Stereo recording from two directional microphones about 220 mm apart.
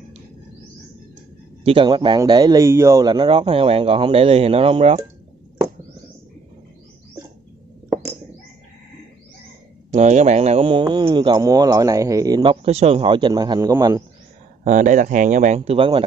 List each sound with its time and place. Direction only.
1.6 s speech: 25° right (ahead or behind)
9.8 s speech: 30° right (ahead or behind)
12.6 s speech: 30° right (ahead or behind)
14.6 s speech: 35° right (ahead or behind)